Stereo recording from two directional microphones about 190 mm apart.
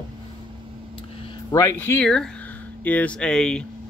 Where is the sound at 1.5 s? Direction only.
15° left (ahead or behind).